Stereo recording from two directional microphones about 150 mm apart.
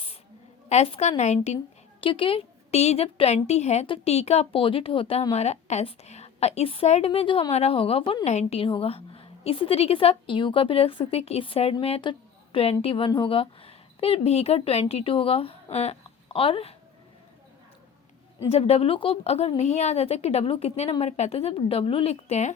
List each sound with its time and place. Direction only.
0.7 s a woman's voice: 45° left (ahead or behind)
2.0 s a woman's voice: 35° left (ahead or behind)
18.5 s a woman's voice: 40° left (ahead or behind)